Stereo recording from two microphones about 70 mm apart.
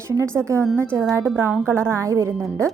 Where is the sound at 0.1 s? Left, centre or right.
Right.